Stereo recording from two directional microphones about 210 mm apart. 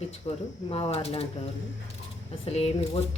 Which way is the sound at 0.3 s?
30° left (ahead or behind).